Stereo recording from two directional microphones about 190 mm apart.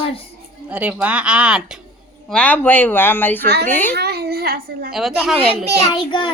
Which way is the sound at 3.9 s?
55° right (ahead or behind).